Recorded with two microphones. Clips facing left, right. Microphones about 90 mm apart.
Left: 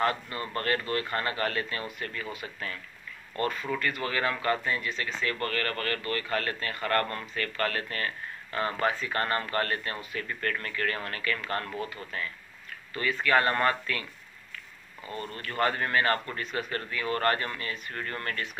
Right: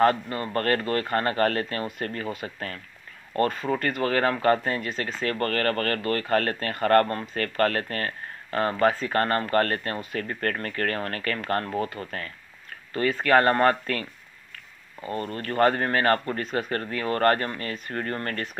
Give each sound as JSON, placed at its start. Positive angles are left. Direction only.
{"t": 0.0, "sound": "speech", "side_deg": -40}
{"t": 15.0, "sound": "speech", "side_deg": -40}